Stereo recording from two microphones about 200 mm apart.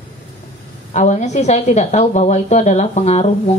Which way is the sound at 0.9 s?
35° left (ahead or behind).